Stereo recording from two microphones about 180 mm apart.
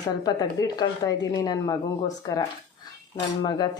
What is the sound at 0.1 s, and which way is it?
Speech, 20° left (ahead or behind).